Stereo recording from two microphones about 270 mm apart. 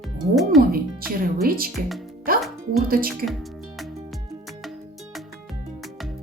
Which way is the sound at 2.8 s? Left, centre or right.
Right.